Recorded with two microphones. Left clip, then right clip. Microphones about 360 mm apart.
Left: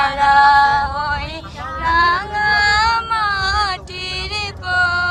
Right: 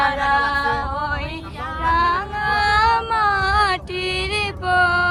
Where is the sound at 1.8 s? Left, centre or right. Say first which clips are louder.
Left 3 dB; centre.